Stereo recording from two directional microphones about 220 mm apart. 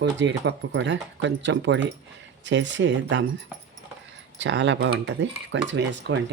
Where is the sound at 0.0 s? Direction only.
55° right (ahead or behind).